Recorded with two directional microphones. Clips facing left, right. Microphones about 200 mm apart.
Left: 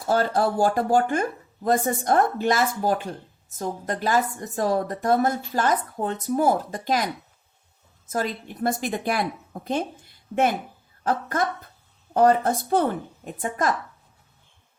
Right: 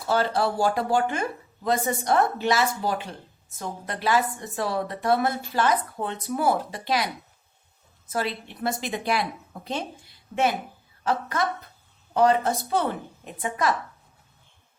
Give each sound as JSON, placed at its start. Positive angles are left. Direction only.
{"t": 0.1, "sound": "a woman's voice", "side_deg": 50}
{"t": 8.1, "sound": "a woman's voice", "side_deg": 45}
{"t": 11.0, "sound": "a woman's voice", "side_deg": 50}